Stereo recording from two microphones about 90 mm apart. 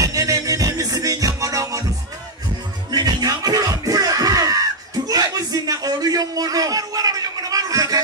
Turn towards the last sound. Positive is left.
turn(degrees=-40)  # may be behind; listen again after turning